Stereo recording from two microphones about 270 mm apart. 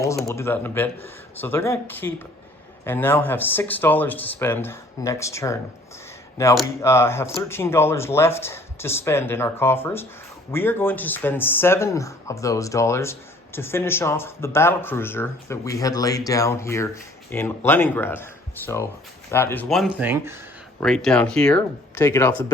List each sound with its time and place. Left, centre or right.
0.3 s speech: centre